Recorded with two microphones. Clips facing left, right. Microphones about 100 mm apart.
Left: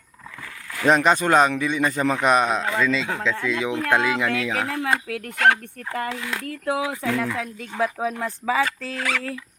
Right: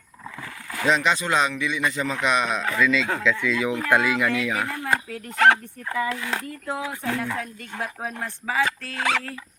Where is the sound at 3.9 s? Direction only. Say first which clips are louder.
Even; 25° left (ahead or behind).